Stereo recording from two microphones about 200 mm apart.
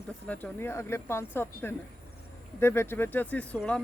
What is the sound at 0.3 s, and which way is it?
Speech, 10° left (ahead or behind).